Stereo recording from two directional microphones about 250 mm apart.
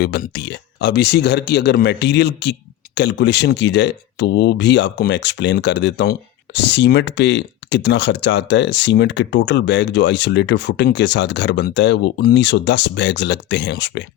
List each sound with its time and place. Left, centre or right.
0.0 s speech: left